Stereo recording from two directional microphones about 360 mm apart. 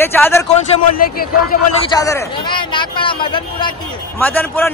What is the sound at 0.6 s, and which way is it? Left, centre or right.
A man's voice, left.